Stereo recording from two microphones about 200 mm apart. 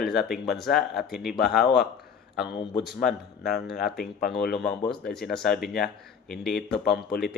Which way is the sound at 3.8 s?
50° left (ahead or behind).